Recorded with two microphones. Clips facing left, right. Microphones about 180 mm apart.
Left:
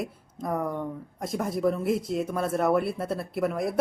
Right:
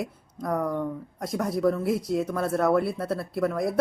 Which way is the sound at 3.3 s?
5° left (ahead or behind).